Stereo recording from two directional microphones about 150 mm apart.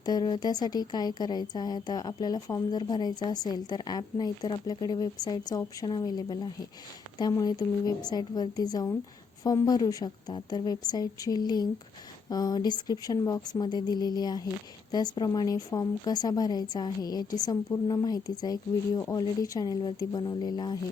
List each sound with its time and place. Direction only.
0.0 s a woman's voice: 25° left (ahead or behind)